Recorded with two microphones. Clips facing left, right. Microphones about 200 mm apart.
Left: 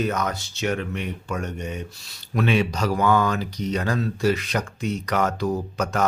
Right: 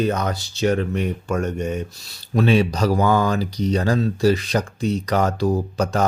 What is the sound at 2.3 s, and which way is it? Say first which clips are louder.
Speech: right 4 dB; 35° right (ahead or behind).